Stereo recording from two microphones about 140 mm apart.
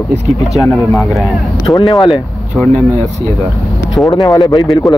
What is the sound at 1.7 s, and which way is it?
Speech, 20° left (ahead or behind).